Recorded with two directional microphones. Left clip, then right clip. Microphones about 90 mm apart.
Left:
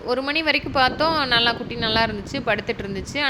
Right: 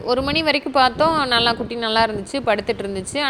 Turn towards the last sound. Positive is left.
turn(degrees=-35)  # may be behind; listen again after turning